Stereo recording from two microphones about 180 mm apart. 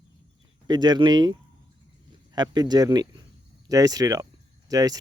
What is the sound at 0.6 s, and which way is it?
Speech, 25° right (ahead or behind).